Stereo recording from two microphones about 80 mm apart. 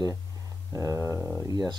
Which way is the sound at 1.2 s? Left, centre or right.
Right.